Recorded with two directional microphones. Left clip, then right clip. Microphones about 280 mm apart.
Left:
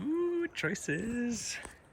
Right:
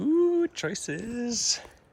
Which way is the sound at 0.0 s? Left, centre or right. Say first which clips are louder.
Right 9 dB; centre.